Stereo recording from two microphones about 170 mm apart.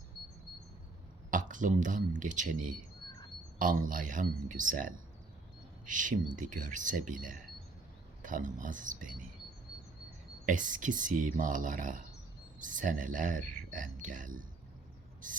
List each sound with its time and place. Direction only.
1.3 s speech: 50° right (ahead or behind)
10.4 s speech: 50° right (ahead or behind)